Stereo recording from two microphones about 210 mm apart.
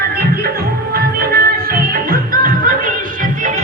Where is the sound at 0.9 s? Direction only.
45° right (ahead or behind).